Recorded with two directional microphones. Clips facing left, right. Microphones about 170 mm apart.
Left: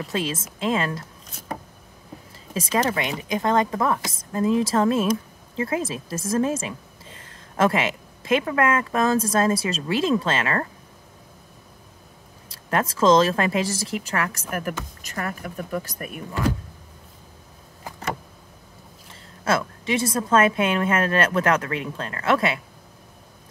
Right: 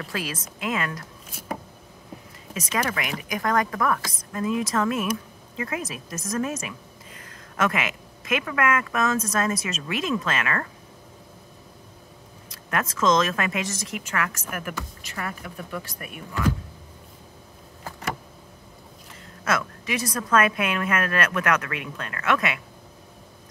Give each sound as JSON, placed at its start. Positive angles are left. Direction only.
{"t": 0.0, "sound": "speech", "side_deg": 25}
{"t": 2.5, "sound": "speech", "side_deg": 30}
{"t": 12.4, "sound": "a woman's voice", "side_deg": 30}
{"t": 19.4, "sound": "speech", "side_deg": 30}